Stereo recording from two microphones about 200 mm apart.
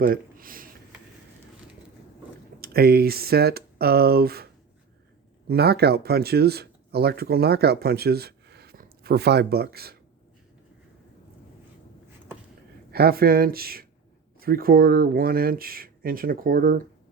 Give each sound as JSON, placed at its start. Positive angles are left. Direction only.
{"t": 0.0, "sound": "a sound", "side_deg": -45}
{"t": 2.6, "sound": "speech", "side_deg": -50}
{"t": 5.5, "sound": "speech", "side_deg": -55}
{"t": 12.9, "sound": "speech", "side_deg": -50}